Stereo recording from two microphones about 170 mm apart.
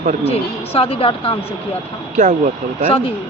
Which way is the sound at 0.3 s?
35° left (ahead or behind).